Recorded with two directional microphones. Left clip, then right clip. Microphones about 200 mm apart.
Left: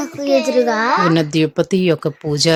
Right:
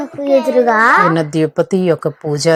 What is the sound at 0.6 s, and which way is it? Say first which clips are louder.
Speech: right 5 dB; 15° right (ahead or behind).